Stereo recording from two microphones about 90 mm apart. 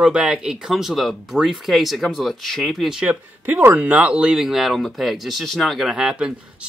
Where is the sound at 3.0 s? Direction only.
20° right (ahead or behind).